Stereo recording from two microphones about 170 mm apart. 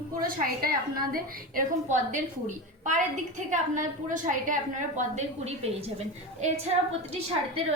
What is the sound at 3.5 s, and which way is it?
A woman's voice, 50° right (ahead or behind).